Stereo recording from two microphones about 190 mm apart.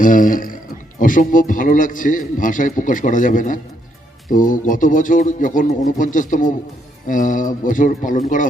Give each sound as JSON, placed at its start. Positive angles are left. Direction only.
{"t": 0.0, "sound": "a man's voice", "side_deg": 45}